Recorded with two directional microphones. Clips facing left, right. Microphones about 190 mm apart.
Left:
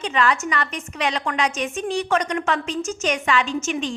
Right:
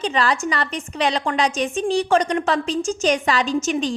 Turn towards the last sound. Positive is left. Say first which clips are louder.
# right 4 dB
turn(degrees=-35)  # may be behind; listen again after turning